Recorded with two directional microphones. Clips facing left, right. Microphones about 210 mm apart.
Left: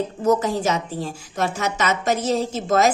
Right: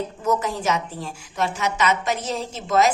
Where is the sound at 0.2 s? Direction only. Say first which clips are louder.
Left 5 dB; 40° left (ahead or behind).